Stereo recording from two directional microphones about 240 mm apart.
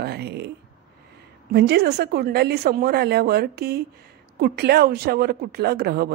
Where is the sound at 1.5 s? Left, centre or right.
Right.